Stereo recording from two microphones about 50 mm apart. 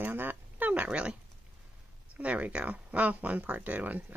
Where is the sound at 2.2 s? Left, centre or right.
Right.